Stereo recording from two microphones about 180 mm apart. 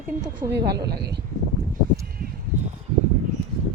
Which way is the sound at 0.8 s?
65° right (ahead or behind).